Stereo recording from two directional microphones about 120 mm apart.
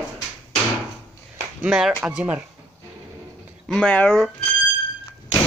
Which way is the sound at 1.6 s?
5° right (ahead or behind).